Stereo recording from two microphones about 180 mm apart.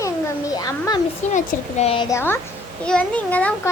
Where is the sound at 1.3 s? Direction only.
45° left (ahead or behind).